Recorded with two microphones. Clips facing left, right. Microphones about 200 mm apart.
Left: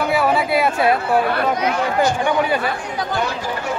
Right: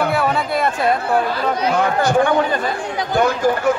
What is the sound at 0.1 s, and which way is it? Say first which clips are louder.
Chatter: left 2 dB; 5° left (ahead or behind).